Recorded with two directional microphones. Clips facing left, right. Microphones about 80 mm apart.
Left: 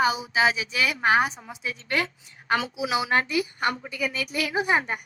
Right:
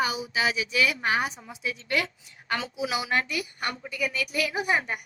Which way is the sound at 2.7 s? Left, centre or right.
Left.